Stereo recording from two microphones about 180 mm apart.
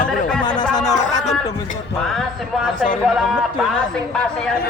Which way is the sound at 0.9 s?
20° left (ahead or behind).